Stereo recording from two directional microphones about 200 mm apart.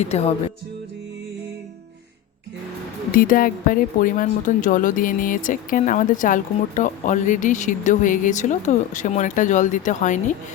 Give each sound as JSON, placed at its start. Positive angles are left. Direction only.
{"t": 0.0, "sound": "speech", "side_deg": 30}
{"t": 3.1, "sound": "speech", "side_deg": 45}